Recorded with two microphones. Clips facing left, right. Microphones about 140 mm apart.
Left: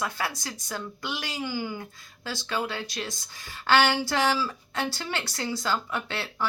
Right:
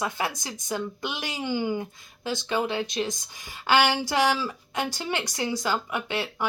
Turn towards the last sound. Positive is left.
turn(degrees=-15)  # may be behind; listen again after turning